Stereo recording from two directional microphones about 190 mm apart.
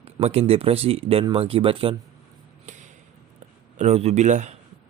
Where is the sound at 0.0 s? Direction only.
35° right (ahead or behind).